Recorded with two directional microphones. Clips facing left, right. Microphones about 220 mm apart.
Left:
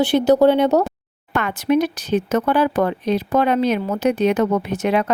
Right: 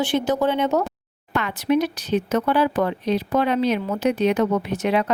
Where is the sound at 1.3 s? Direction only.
50° left (ahead or behind).